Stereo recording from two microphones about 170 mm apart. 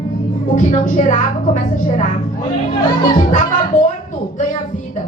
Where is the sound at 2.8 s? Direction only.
25° left (ahead or behind).